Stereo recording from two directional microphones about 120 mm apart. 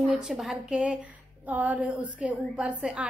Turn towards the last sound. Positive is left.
turn(degrees=-10)  # may be behind; listen again after turning